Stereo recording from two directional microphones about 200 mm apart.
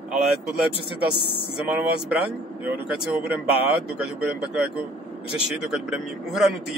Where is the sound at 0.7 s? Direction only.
25° left (ahead or behind).